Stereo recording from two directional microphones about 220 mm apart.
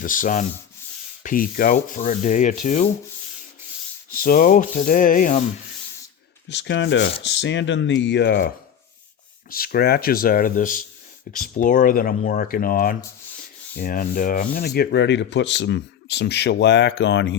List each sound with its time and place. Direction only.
0.0 s speech: 35° left (ahead or behind)
4.1 s speech: 40° left (ahead or behind)
6.5 s sanding: 55° left (ahead or behind)
9.5 s speech: 40° left (ahead or behind)
13.7 s sanding: 40° left (ahead or behind); by 17.3 s 55° left (ahead or behind)